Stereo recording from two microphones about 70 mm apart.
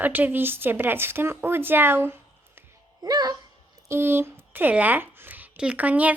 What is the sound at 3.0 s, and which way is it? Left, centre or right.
Speech, right.